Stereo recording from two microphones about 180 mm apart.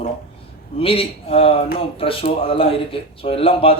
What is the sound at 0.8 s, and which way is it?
Speech, 30° left (ahead or behind).